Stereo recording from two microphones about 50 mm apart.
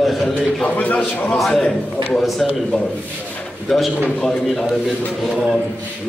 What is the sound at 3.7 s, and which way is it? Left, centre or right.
Speech, centre.